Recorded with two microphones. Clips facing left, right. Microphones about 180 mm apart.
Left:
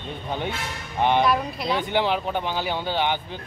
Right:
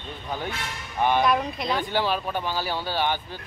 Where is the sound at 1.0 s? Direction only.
20° left (ahead or behind).